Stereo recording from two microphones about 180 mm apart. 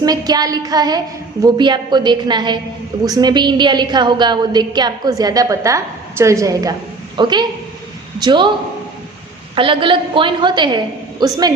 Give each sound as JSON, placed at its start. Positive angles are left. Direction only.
{"t": 0.0, "sound": "a woman's voice", "side_deg": -20}
{"t": 9.6, "sound": "a woman's voice", "side_deg": -30}